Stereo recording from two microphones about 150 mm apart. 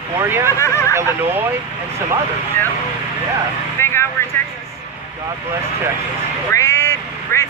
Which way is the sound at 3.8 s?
20° left (ahead or behind).